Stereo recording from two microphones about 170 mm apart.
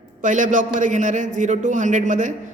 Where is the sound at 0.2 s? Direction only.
50° right (ahead or behind).